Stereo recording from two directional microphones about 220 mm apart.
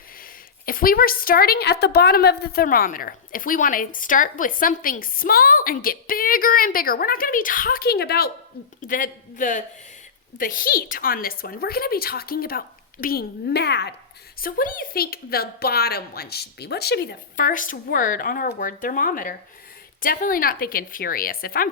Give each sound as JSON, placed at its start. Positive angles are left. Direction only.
{"t": 0.2, "sound": "a woman's voice", "side_deg": 40}